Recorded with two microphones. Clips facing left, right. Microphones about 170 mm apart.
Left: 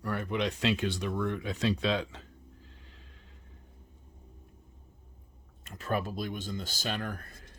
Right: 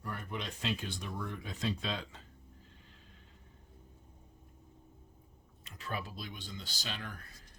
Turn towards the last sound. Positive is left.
turn(degrees=55)  # may be behind; listen again after turning